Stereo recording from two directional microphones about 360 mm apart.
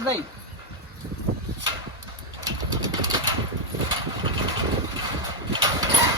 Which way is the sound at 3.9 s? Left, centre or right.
Centre.